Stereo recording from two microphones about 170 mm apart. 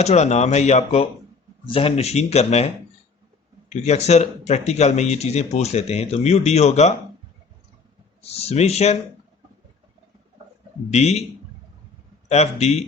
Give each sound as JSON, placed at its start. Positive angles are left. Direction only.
{"t": 0.0, "sound": "speech", "side_deg": 40}
{"t": 8.2, "sound": "speech", "side_deg": 40}
{"t": 10.9, "sound": "speech", "side_deg": 40}
{"t": 12.3, "sound": "speech", "side_deg": 40}